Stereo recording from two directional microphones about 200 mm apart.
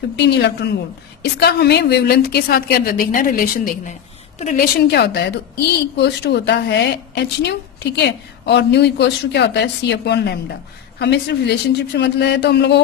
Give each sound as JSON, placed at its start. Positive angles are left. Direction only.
{"t": 0.2, "sound": "a woman's voice", "side_deg": 55}